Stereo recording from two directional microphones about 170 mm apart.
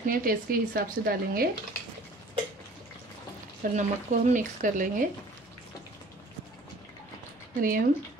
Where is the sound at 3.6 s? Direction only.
55° right (ahead or behind).